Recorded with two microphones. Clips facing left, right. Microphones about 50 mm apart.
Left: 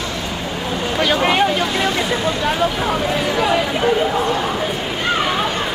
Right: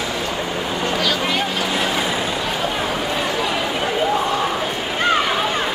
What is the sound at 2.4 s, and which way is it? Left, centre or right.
Chatter, centre.